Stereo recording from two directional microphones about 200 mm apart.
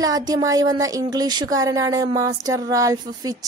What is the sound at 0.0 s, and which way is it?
Speech, 20° right (ahead or behind).